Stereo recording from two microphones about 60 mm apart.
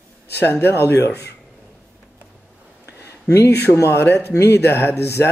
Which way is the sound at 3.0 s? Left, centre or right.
Left.